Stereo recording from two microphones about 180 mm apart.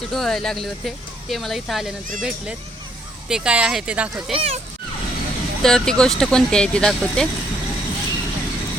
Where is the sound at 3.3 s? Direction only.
5° right (ahead or behind).